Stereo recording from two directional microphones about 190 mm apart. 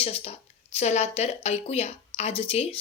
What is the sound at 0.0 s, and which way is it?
A woman's voice, 30° left (ahead or behind).